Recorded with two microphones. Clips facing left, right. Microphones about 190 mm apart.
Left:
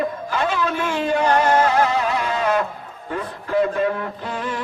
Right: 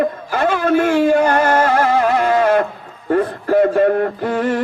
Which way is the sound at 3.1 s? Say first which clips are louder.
Right 11 dB; 55° right (ahead or behind).